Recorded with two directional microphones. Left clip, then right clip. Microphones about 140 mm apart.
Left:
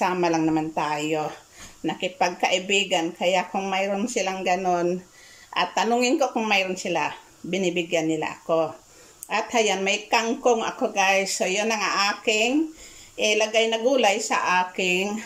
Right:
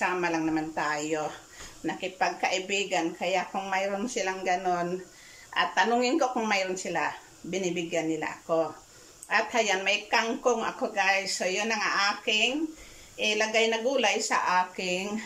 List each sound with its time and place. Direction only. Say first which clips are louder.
0.0 s speech: left 5 dB; 30° left (ahead or behind)